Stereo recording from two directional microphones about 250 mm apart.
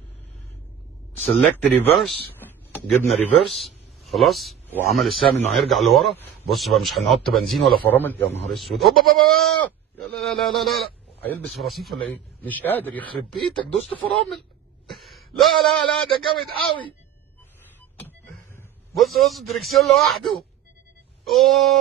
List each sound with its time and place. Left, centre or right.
1.4 s a man's voice: centre
14.9 s speech: centre
16.1 s a man's voice: centre
18.6 s a man's voice: centre
21.2 s a sound: centre